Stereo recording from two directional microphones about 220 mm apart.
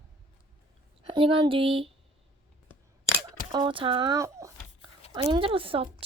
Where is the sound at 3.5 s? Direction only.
20° right (ahead or behind).